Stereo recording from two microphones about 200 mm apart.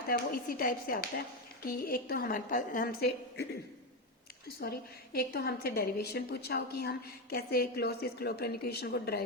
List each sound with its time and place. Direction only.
0.1 s a woman's voice: 45° left (ahead or behind)
4.6 s a woman's voice: 50° left (ahead or behind)